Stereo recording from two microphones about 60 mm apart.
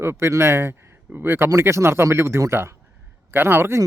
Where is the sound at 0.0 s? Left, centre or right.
Right.